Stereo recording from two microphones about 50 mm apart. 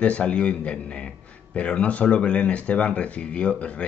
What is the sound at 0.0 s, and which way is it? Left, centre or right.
Speech, left.